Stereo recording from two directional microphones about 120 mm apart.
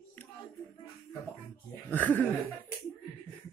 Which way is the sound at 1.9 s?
15° left (ahead or behind).